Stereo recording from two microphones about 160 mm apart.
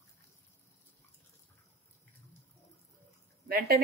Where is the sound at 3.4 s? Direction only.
70° right (ahead or behind).